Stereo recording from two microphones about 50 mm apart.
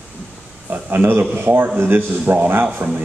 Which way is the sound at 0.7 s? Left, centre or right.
Right.